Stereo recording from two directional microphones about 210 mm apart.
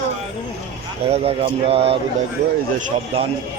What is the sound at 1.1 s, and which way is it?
Speech, 30° right (ahead or behind).